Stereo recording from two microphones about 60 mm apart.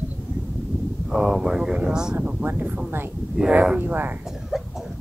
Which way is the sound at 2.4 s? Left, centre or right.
Right.